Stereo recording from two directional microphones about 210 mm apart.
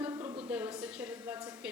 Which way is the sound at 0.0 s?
20° right (ahead or behind).